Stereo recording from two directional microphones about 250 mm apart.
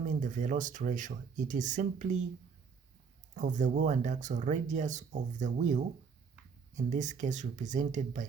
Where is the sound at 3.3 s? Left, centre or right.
Right.